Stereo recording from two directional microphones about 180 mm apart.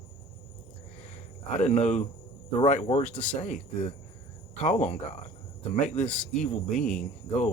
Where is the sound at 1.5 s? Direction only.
40° left (ahead or behind).